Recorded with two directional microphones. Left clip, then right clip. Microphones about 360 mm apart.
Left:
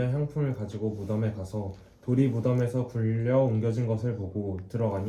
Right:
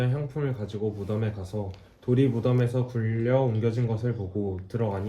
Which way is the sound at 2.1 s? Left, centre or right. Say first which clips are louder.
Right 2 dB; right.